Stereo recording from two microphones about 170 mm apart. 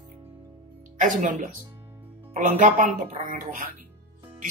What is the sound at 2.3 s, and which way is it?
Speech, 45° right (ahead or behind).